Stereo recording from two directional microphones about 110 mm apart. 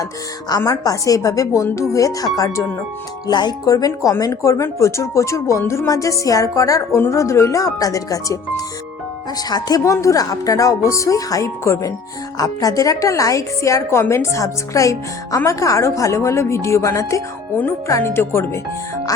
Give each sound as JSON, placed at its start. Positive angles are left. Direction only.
{"t": 0.0, "sound": "a woman's voice", "side_deg": 35}